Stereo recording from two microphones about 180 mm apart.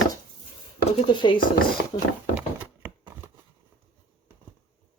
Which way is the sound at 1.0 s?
25° left (ahead or behind).